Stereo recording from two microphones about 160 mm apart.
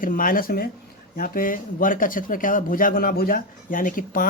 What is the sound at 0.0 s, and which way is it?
Speech, 60° left (ahead or behind).